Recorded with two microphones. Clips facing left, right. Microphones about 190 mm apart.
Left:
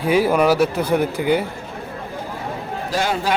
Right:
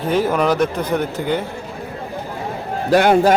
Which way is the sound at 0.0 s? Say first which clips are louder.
Left 1 dB; 10° left (ahead or behind).